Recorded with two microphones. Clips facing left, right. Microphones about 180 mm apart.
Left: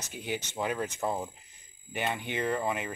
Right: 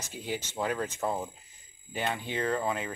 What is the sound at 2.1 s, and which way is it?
Speech, 15° left (ahead or behind).